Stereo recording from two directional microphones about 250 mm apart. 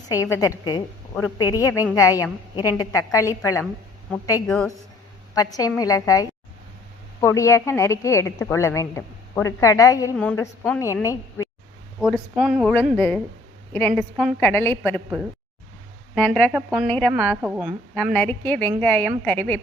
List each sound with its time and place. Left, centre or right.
0.1 s a woman's voice: centre
5.3 s a woman's voice: centre
11.9 s a woman's voice: centre
16.1 s speech: centre
17.2 s a woman's voice: centre